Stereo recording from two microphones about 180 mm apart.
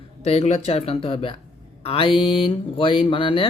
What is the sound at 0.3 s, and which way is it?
Speech, 35° left (ahead or behind).